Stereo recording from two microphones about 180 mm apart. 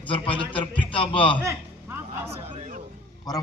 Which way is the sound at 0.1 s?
30° left (ahead or behind).